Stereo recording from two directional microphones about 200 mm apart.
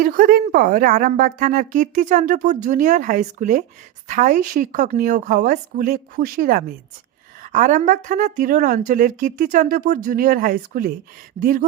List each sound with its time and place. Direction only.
0.0 s a woman's voice: 45° right (ahead or behind)